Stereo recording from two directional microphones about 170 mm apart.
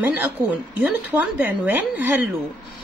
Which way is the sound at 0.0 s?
10° right (ahead or behind).